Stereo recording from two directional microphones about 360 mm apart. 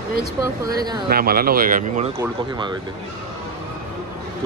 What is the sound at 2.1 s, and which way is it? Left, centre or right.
Speech, centre.